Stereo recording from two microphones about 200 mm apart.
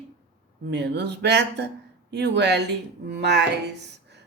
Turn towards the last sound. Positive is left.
turn(degrees=-60)  # may be behind; listen again after turning